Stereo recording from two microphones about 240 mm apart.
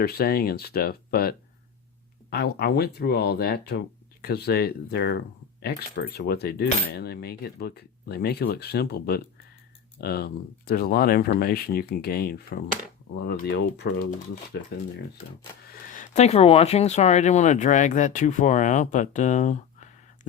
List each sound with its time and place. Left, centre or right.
0.0 s speech: left
15.9 s speech: left